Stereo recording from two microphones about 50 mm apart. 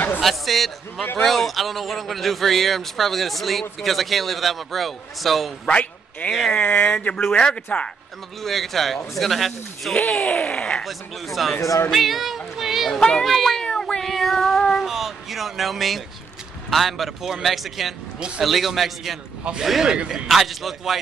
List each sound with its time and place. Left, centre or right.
0.2 s a man's voice: centre
5.7 s a man's voice: left
7.3 s speech: left
8.4 s a man's voice: centre
10.0 s speech: centre
11.4 s a man's voice: centre
13.0 s a man's voice: centre
13.7 s child singing: centre
14.1 s a man's voice: centre
14.9 s a man's voice: centre